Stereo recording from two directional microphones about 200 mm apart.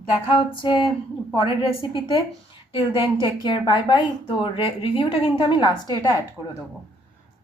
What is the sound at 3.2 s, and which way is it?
A woman's voice, 25° left (ahead or behind).